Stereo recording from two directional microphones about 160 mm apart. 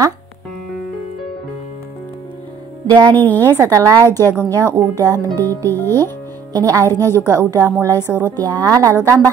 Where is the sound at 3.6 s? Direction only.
20° right (ahead or behind).